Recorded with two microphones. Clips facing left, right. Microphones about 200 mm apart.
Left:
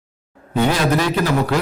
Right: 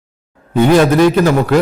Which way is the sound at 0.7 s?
50° right (ahead or behind).